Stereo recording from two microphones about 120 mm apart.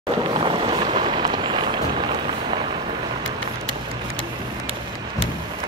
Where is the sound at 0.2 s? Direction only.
45° right (ahead or behind).